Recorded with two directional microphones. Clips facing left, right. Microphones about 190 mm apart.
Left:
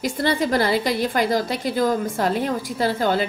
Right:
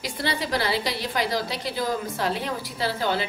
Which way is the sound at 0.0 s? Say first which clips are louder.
Left 7 dB; 50° left (ahead or behind).